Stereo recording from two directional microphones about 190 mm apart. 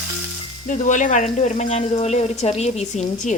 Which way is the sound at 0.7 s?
40° left (ahead or behind).